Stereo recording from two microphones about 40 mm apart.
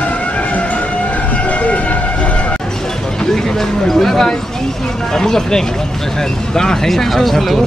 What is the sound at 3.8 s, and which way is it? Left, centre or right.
Speech, centre.